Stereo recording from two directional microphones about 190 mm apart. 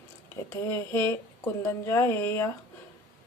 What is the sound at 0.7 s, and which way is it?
A woman's voice, 15° left (ahead or behind).